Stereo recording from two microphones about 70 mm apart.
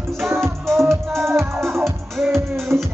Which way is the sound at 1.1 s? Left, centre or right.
Right.